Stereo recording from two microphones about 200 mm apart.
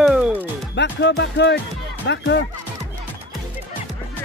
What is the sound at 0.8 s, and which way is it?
Speech, 60° left (ahead or behind).